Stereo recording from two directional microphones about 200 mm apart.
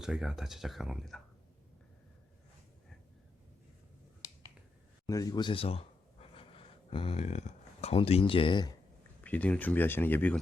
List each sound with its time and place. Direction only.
0.0 s speech: centre (ahead or behind)
5.0 s speech: 15° left (ahead or behind)
9.2 s speech: 5° left (ahead or behind)